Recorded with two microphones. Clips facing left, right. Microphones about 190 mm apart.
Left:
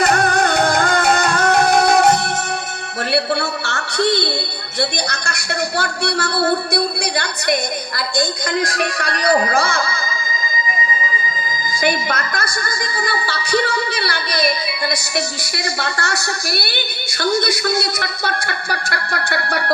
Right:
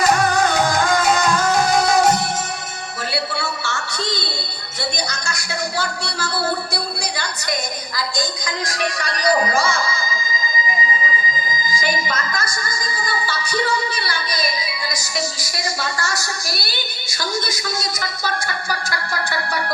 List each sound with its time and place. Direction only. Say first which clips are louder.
0.0 s music: left 1 dB; 60° left (ahead or behind)
4.8 s speech: left 4 dB; 60° left (ahead or behind)
11.7 s speech: left 5 dB; 60° left (ahead or behind)